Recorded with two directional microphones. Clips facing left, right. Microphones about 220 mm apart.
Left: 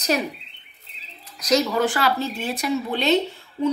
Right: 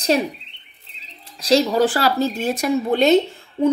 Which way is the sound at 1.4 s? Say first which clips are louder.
Right 4 dB; 30° right (ahead or behind).